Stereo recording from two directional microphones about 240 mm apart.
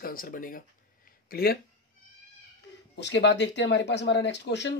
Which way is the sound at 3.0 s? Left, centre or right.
Left.